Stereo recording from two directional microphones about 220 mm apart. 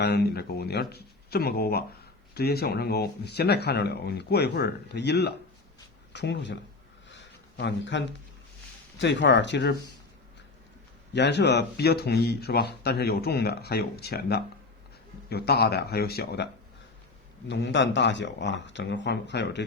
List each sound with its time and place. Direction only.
0.0 s speech: 45° left (ahead or behind)
7.1 s a sound: 50° left (ahead or behind)
9.0 s speech: 55° left (ahead or behind)
11.1 s speech: 50° left (ahead or behind)
17.5 s speech: 55° left (ahead or behind)